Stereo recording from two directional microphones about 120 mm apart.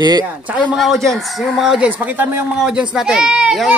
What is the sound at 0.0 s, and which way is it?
Speech, 35° right (ahead or behind).